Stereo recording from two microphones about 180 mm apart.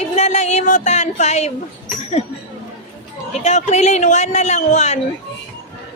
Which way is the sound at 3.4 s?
40° left (ahead or behind).